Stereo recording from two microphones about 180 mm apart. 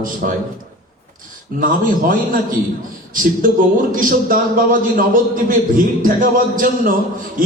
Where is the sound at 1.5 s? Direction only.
50° right (ahead or behind).